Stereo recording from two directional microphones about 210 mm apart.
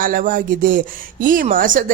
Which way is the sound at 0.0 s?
40° right (ahead or behind).